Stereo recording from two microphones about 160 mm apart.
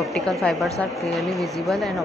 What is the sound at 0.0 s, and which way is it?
Speech, centre (ahead or behind).